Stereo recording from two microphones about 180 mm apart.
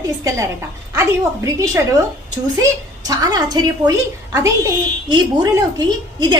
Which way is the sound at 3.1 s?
20° right (ahead or behind).